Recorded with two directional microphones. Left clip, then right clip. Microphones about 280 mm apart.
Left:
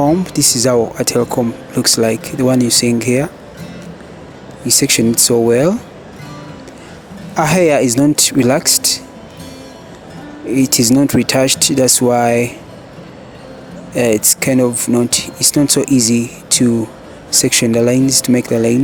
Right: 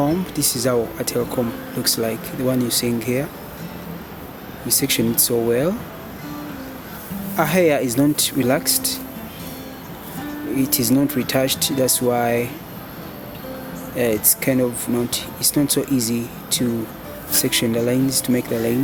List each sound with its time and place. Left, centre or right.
0.3 s speech: left
4.6 s speech: left
7.3 s speech: left
10.5 s speech: left
13.9 s speech: left